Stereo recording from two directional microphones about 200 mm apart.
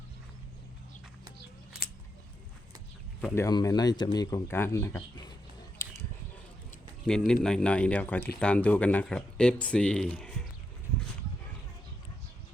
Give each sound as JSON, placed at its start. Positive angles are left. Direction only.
{"t": 3.3, "sound": "speech", "side_deg": 15}
{"t": 7.0, "sound": "speech", "side_deg": 5}